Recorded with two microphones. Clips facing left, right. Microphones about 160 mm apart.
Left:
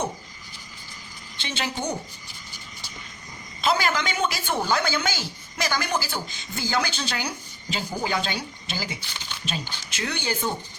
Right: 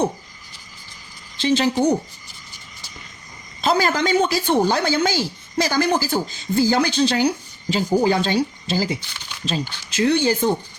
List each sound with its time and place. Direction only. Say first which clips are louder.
1.4 s a woman's voice: right 12 dB; 35° right (ahead or behind)
3.6 s a woman's voice: right 5 dB; 40° right (ahead or behind)